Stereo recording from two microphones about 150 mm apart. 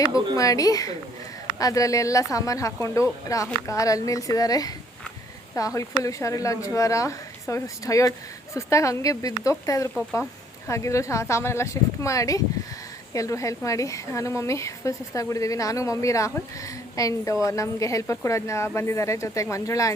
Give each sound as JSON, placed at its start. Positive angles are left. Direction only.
{"t": 0.3, "sound": "speech", "side_deg": 25}